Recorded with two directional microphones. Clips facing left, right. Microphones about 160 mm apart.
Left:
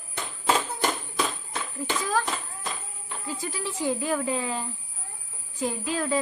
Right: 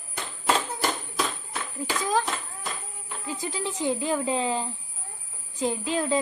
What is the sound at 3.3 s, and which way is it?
Speech, 20° right (ahead or behind).